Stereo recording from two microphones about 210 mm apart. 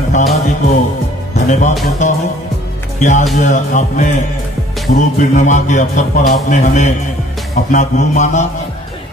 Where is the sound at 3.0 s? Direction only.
35° left (ahead or behind).